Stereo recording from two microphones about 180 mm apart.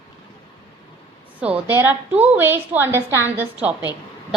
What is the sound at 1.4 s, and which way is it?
A woman's voice, 10° right (ahead or behind).